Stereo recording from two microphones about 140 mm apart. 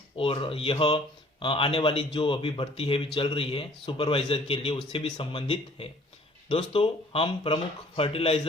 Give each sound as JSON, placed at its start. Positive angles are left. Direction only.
{"t": 0.2, "sound": "speech", "side_deg": 40}